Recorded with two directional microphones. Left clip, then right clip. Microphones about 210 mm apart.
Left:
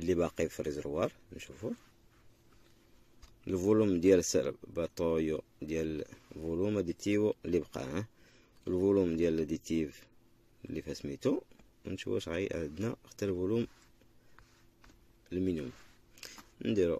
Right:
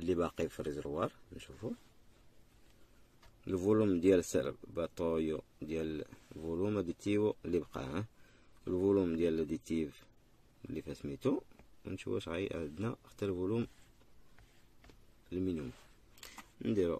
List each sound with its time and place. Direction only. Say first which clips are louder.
0.0 s speech: left 3 dB; 5° right (ahead or behind)
3.4 s speech: left 2 dB; 10° right (ahead or behind)
15.2 s speech: left 3 dB; 5° right (ahead or behind)
16.2 s a sound: left 3 dB; 15° right (ahead or behind)